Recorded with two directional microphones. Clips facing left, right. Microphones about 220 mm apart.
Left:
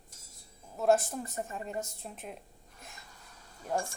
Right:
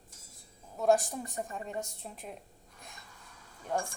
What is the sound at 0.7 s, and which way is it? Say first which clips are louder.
A woman's voice: even; centre (ahead or behind).